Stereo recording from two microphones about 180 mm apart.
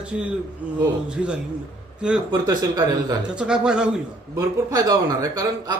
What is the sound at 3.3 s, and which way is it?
Speech, 5° right (ahead or behind).